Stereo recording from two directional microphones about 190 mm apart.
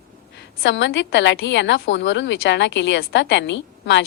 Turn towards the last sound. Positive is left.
turn(degrees=70)  # may be behind; listen again after turning